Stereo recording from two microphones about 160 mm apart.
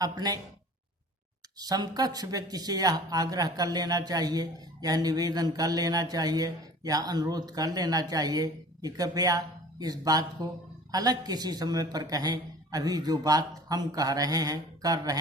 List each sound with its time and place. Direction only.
0.0 s speech: 25° right (ahead or behind)
1.5 s speech: 25° right (ahead or behind)